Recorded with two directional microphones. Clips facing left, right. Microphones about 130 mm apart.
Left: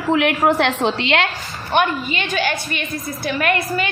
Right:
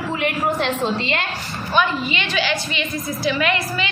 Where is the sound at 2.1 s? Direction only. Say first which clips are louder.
Left 1 dB; 50° left (ahead or behind).